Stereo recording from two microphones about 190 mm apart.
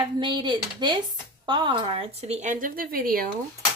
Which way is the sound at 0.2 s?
25° right (ahead or behind).